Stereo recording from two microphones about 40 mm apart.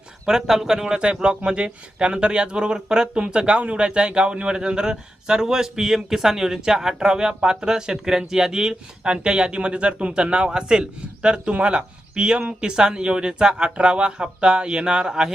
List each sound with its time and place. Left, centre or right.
0.3 s a man's voice: centre